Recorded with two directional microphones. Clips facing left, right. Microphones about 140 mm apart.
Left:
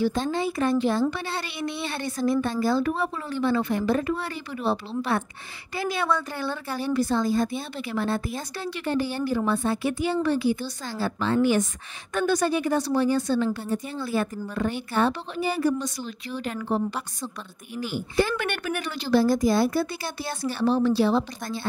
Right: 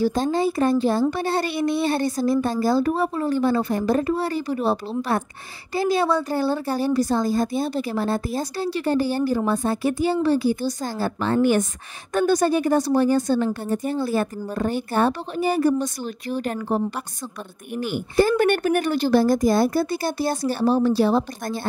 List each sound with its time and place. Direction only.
0.0 s a woman's voice: 40° right (ahead or behind)
12.1 s a woman's voice: 40° right (ahead or behind)
17.7 s speech: 55° right (ahead or behind)
18.1 s a woman's voice: 40° right (ahead or behind)